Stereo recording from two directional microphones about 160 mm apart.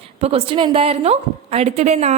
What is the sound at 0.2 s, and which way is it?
A woman's voice, 35° right (ahead or behind).